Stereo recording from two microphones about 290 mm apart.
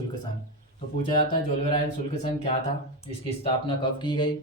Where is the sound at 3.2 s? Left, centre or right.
Centre.